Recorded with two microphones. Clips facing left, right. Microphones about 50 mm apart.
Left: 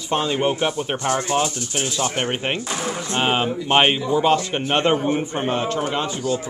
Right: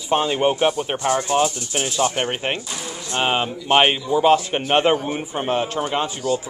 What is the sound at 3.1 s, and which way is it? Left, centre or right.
Speech, centre.